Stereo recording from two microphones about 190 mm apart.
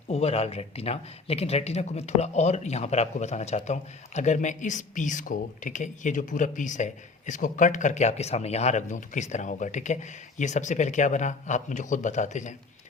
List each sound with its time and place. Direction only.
0.1 s speech: 35° left (ahead or behind)